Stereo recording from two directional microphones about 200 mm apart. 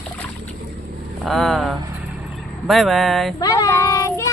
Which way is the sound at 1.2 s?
Centre (ahead or behind).